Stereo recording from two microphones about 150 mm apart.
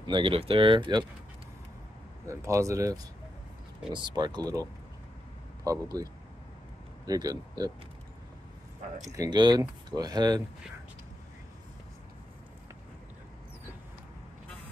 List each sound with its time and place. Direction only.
0.0 s speech: 35° right (ahead or behind)
2.2 s speech: 20° right (ahead or behind)
7.1 s speech: 25° right (ahead or behind)
9.1 s speech: 25° right (ahead or behind)